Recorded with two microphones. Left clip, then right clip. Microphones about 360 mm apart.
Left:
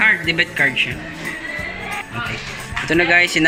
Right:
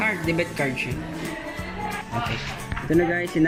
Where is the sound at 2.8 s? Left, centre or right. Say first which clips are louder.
Left 8 dB; left.